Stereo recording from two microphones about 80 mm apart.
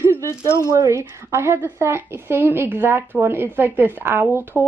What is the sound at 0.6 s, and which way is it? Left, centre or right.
A woman's voice, right.